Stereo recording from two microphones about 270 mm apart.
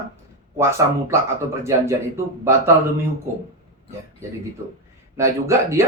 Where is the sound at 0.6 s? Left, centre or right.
Centre.